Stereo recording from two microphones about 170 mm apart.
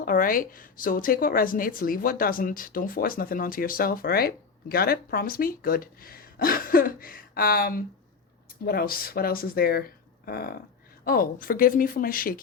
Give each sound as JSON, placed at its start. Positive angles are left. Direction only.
{"t": 0.0, "sound": "speech", "side_deg": 55}